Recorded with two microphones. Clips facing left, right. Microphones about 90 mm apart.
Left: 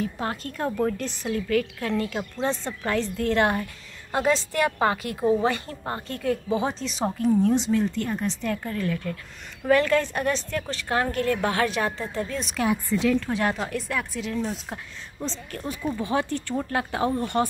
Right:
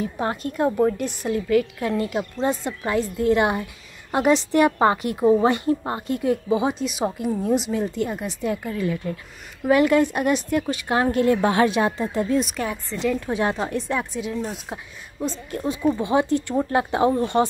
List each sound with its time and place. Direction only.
0.0 s a woman's voice: 20° right (ahead or behind)
12.4 s a woman's voice: centre (ahead or behind)
13.1 s speech: 15° right (ahead or behind)